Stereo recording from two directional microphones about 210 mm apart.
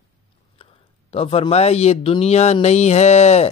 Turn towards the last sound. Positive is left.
turn(degrees=30)  # may be behind; listen again after turning